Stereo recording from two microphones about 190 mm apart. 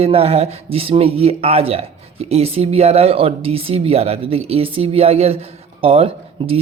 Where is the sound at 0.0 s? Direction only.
30° right (ahead or behind).